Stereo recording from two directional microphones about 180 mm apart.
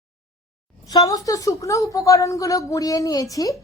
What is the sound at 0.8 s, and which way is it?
A woman's voice, 20° left (ahead or behind).